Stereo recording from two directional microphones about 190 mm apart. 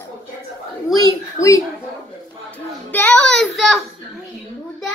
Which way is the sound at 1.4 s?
40° left (ahead or behind).